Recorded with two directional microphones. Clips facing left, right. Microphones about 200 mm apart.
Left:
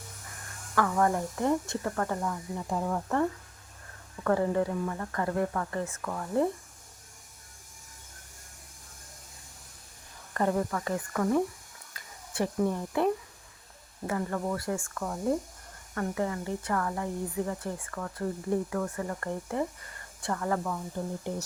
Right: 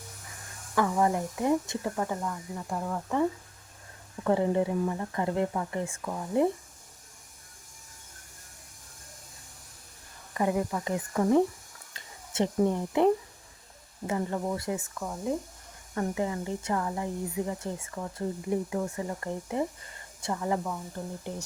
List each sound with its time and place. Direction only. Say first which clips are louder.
0.8 s a woman's voice: right 1 dB; 15° right (ahead or behind)
2.2 s speech: left 2 dB; centre (ahead or behind)
4.2 s a woman's voice: right 1 dB; 20° right (ahead or behind)
10.3 s a woman's voice: even; 15° right (ahead or behind)
11.9 s a sound: right 2 dB; 25° right (ahead or behind)
14.1 s speech: right 1 dB; 20° right (ahead or behind)
15.0 s speech: left 3 dB; 5° right (ahead or behind)
16.0 s a woman's voice: right 1 dB; 20° right (ahead or behind)